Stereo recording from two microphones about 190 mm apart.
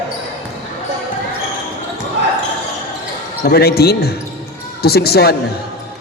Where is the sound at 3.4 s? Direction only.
55° left (ahead or behind).